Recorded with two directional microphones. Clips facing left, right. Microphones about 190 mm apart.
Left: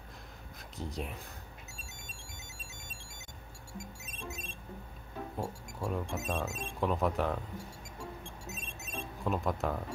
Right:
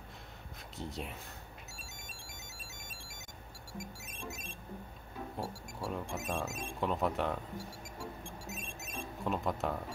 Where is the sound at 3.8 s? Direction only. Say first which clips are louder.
Left 1 dB; 25° left (ahead or behind).